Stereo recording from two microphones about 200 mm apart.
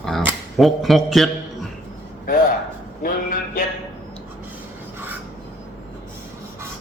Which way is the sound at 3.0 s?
45° left (ahead or behind).